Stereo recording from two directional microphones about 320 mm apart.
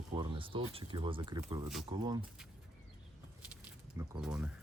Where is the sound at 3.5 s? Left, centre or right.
Centre.